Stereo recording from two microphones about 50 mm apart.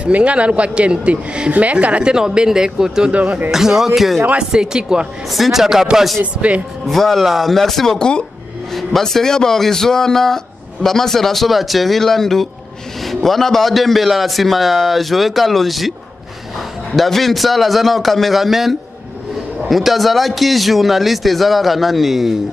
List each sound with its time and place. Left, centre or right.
0.0 s speech: right
3.1 s speech: right
3.5 s a man's voice: centre
4.4 s a man's voice: centre
5.3 s a man's voice: centre
6.9 s a man's voice: centre
16.9 s a man's voice: centre